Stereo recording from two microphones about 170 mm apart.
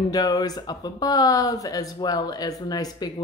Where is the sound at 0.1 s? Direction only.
20° left (ahead or behind).